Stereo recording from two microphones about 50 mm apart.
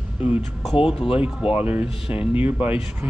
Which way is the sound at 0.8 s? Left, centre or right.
Right.